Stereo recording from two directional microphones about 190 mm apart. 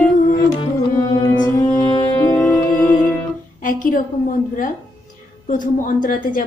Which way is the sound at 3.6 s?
45° left (ahead or behind).